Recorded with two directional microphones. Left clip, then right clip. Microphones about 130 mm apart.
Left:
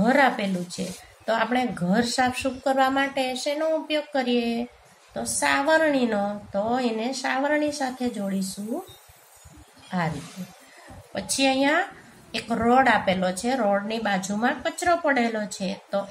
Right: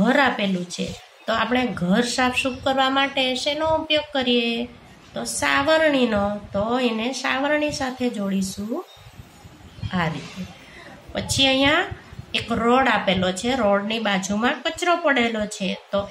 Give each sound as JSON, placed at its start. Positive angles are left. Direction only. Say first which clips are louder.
{"t": 0.0, "sound": "a sound", "louder": "right 1 dB", "side_deg": 45}
{"t": 0.8, "sound": "a woman's voice", "louder": "right 3 dB", "side_deg": 35}
{"t": 9.8, "sound": "a woman's voice", "louder": "right 3 dB", "side_deg": 35}
{"t": 11.1, "sound": "a woman's voice", "louder": "right 4 dB", "side_deg": 50}